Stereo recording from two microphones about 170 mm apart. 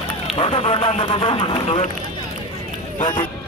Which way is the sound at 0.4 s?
30° left (ahead or behind).